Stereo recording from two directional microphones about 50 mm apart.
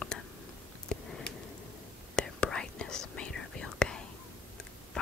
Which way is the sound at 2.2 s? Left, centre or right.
Centre.